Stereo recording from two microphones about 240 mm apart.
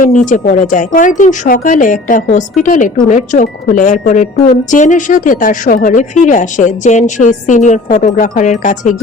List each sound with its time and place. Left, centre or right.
0.0 s speech: left